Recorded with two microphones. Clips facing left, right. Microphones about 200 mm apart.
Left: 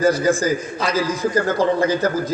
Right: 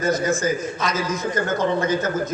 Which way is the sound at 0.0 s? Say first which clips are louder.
Left 4 dB; 35° left (ahead or behind).